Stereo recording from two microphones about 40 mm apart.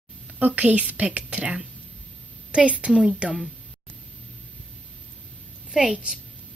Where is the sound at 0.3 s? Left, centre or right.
Right.